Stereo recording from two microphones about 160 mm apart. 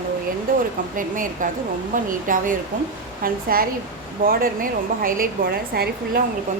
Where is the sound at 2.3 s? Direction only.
55° right (ahead or behind); by 6.2 s 75° right (ahead or behind).